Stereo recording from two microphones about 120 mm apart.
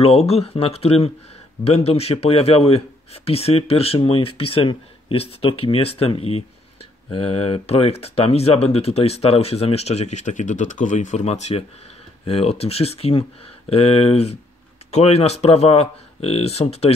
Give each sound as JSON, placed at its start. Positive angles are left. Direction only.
{"t": 0.0, "sound": "a man's voice", "side_deg": 55}